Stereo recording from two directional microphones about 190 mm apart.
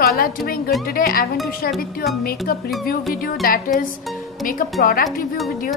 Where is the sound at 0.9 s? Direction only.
50° left (ahead or behind).